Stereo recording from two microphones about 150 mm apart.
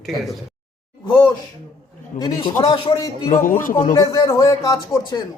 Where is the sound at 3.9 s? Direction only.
25° left (ahead or behind).